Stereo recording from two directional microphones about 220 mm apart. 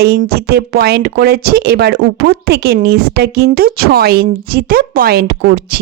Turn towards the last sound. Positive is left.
turn(degrees=-45)  # may be behind; listen again after turning